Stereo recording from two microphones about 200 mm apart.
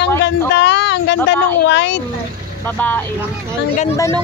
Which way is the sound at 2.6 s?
10° left (ahead or behind).